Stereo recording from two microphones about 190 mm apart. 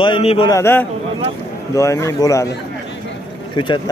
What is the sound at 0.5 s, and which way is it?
Speech, 10° left (ahead or behind).